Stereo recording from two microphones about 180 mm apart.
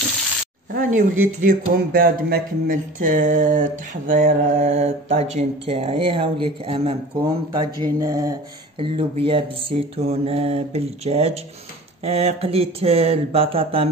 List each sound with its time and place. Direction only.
0.7 s speech: 50° right (ahead or behind); by 7.3 s 30° right (ahead or behind)
7.8 s mantra: 20° right (ahead or behind)
8.7 s mantra: 30° right (ahead or behind)